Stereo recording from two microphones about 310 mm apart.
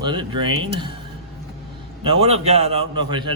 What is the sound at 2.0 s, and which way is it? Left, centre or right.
A man's voice, centre.